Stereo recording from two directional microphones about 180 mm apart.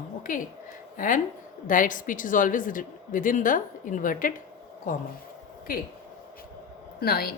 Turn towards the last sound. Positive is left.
turn(degrees=60)  # may be behind; listen again after turning